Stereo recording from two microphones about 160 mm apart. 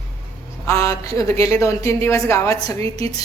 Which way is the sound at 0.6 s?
20° left (ahead or behind).